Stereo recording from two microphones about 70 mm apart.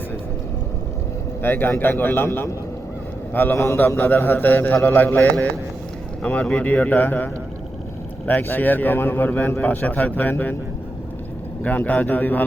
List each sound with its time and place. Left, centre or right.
1.4 s a man's voice: left
6.2 s a man's voice: centre
8.3 s a man's voice: left
11.6 s a man's voice: left